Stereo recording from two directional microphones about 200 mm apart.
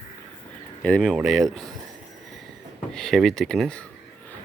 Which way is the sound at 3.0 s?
Centre (ahead or behind).